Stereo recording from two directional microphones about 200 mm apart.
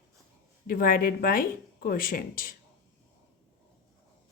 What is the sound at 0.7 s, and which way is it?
Speech, 45° left (ahead or behind).